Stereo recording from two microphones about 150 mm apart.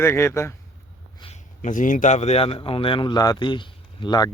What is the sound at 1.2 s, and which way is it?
A man's voice, 50° left (ahead or behind).